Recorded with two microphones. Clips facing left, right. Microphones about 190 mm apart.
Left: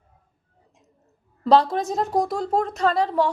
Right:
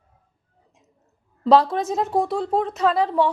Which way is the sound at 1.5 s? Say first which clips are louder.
Right 1 dB; centre (ahead or behind).